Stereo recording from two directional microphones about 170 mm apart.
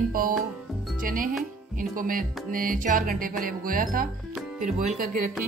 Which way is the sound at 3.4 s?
55° right (ahead or behind).